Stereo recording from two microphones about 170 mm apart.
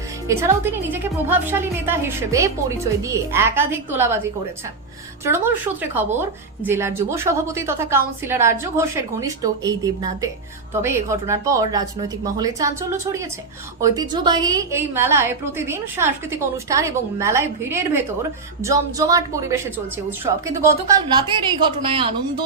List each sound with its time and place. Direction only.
0.3 s a woman's voice: 15° right (ahead or behind)